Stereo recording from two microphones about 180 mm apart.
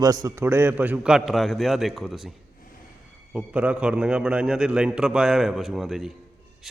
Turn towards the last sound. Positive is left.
turn(degrees=0)  # may be behind; listen again after turning